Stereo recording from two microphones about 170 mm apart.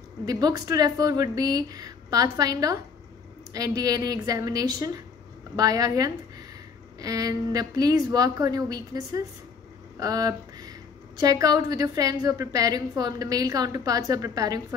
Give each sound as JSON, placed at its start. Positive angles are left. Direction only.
{"t": 0.2, "sound": "a woman's voice", "side_deg": -20}